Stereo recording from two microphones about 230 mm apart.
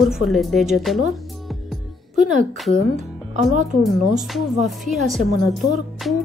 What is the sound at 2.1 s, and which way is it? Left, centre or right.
Speech, right.